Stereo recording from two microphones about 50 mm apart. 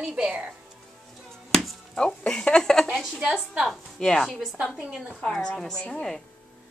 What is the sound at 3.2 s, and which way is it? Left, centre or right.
Speech, centre.